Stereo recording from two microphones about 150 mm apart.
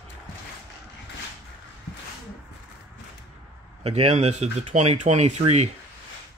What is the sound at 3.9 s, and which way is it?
Speech, 45° right (ahead or behind).